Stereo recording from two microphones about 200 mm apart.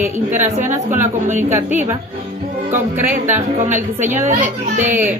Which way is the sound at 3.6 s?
40° right (ahead or behind).